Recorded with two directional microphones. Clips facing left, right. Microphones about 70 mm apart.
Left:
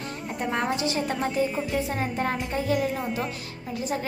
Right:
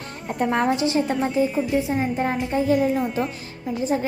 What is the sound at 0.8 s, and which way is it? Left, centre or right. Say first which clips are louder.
Speech: right 5 dB; right.